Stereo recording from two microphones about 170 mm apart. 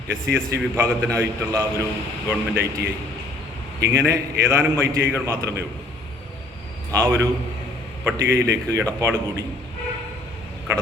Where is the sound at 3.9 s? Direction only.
15° right (ahead or behind).